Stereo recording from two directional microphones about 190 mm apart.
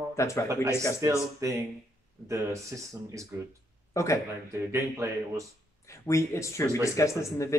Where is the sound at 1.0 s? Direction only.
15° right (ahead or behind).